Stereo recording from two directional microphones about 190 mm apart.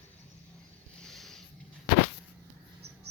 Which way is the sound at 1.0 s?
Centre (ahead or behind).